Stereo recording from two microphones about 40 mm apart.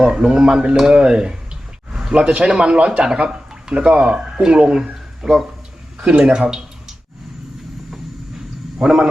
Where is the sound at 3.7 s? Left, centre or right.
Right.